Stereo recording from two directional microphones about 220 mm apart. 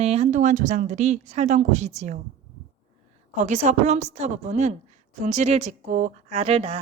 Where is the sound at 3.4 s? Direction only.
30° right (ahead or behind).